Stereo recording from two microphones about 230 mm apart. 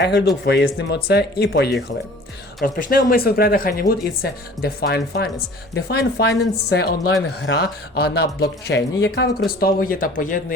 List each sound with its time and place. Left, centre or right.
0.0 s a woman's voice: left